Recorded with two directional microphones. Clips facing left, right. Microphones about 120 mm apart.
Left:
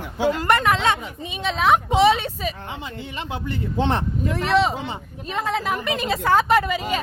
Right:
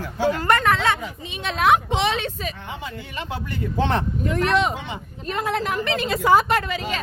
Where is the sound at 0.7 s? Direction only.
20° left (ahead or behind).